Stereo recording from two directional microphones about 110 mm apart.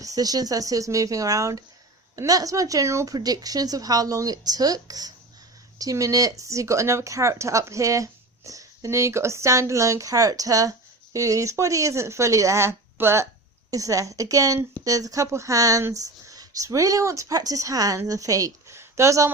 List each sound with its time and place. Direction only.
0.0 s speech: 35° right (ahead or behind)